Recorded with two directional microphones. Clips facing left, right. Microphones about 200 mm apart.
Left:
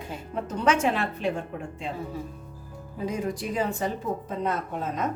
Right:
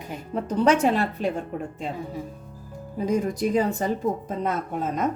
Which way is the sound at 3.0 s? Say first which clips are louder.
Right 6 dB; 40° right (ahead or behind).